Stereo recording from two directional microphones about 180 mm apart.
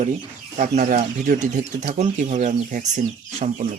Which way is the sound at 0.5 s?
45° right (ahead or behind).